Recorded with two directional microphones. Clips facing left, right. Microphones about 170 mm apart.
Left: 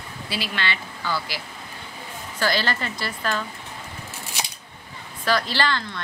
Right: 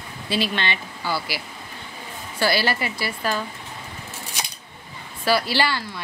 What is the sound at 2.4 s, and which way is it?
Speech, 10° right (ahead or behind).